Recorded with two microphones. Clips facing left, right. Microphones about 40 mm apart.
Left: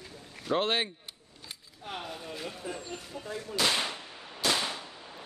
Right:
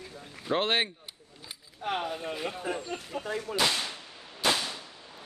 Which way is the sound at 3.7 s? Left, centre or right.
Left.